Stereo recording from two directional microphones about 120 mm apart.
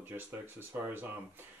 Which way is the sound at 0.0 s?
15° right (ahead or behind).